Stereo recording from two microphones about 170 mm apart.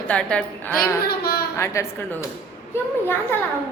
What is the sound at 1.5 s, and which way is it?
Speech, 15° left (ahead or behind).